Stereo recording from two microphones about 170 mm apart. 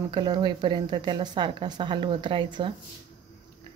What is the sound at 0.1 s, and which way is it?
Speech, 25° right (ahead or behind).